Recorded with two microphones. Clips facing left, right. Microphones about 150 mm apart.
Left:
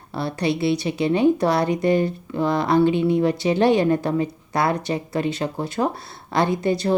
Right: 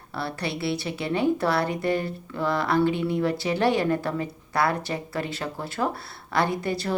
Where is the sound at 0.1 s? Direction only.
20° left (ahead or behind).